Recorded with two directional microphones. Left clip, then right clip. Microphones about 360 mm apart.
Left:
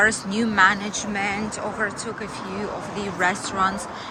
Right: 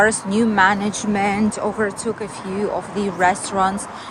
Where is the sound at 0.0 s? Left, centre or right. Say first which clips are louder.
Right 4 dB; centre.